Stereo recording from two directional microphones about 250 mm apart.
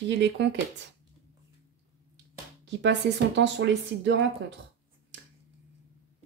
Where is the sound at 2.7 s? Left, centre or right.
Right.